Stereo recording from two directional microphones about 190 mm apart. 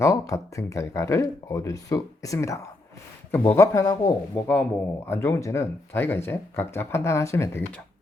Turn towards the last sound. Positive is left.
turn(degrees=15)  # may be behind; listen again after turning